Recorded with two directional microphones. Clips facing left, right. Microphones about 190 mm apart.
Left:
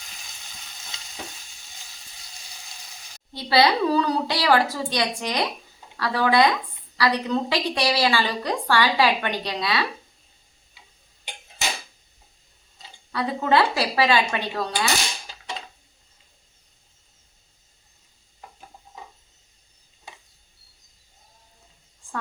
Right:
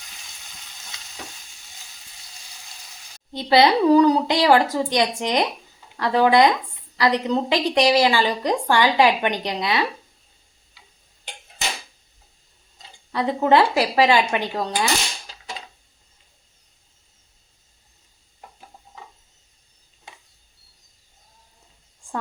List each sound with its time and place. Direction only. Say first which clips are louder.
3.3 s a woman's voice: right 3 dB; 20° right (ahead or behind)
13.1 s a woman's voice: right 4 dB; 20° right (ahead or behind)